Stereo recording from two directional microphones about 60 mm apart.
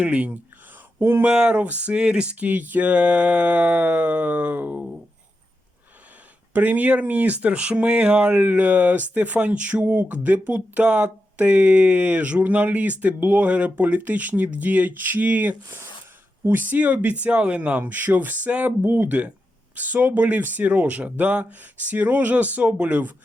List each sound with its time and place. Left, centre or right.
0.0 s speech: right
0.9 s speech: right
1.2 s speech: centre
6.5 s speech: right